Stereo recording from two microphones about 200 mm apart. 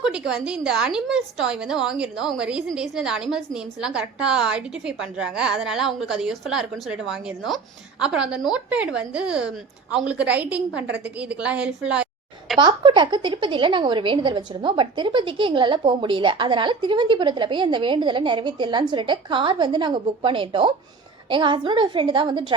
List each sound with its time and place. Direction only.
0.0 s a woman's voice: 5° right (ahead or behind)
12.5 s a woman's voice: 25° right (ahead or behind)